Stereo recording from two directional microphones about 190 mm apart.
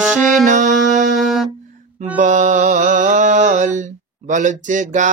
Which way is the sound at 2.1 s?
40° right (ahead or behind).